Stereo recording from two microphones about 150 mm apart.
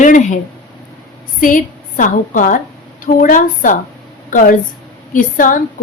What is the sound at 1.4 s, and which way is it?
A woman's voice, 65° left (ahead or behind).